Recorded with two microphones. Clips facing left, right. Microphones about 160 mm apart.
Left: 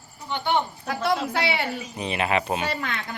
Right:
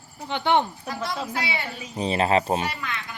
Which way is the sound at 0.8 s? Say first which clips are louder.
Left 5 dB; 65° left (ahead or behind).